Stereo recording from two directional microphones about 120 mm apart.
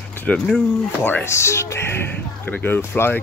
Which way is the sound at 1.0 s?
20° left (ahead or behind).